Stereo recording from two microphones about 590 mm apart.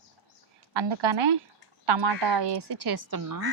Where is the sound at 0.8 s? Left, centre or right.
Right.